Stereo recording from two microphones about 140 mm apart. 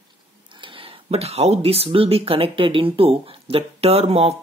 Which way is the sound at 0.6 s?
40° right (ahead or behind).